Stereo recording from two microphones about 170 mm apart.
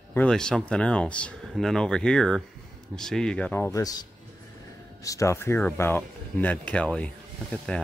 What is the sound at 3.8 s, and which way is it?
Speech, 20° left (ahead or behind).